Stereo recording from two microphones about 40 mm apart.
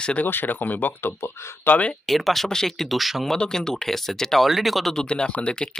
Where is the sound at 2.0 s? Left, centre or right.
Centre.